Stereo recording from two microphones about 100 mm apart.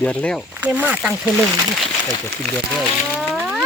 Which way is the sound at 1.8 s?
5° left (ahead or behind).